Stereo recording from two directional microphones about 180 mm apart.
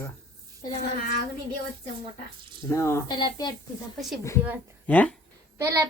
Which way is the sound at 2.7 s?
15° left (ahead or behind).